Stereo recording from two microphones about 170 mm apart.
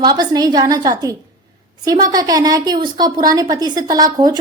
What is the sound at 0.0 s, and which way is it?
A woman's voice, 25° right (ahead or behind).